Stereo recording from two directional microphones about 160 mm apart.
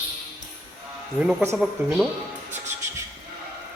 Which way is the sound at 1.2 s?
5° right (ahead or behind).